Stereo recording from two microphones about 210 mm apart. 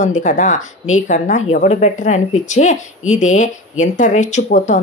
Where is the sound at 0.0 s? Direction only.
35° left (ahead or behind).